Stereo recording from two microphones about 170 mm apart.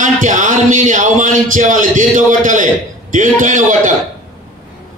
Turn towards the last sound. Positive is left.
turn(degrees=-50)  # may be behind; listen again after turning